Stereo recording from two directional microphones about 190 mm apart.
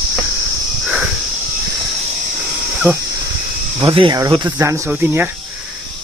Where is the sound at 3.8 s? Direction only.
25° right (ahead or behind).